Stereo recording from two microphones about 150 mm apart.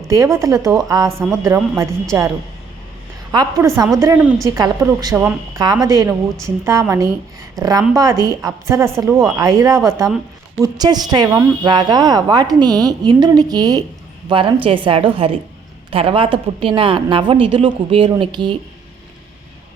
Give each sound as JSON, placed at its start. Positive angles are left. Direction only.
{"t": 0.1, "sound": "a woman's voice", "side_deg": -20}
{"t": 3.3, "sound": "a woman's voice", "side_deg": -20}